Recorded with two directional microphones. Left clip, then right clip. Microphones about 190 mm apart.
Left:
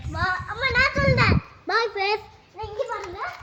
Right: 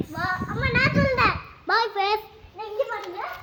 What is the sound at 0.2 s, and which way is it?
Children playing, 35° left (ahead or behind).